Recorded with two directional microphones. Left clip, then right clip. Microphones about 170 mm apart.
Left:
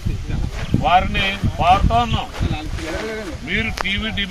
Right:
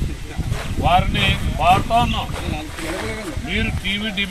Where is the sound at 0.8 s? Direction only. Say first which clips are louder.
Left 1 dB; 20° right (ahead or behind).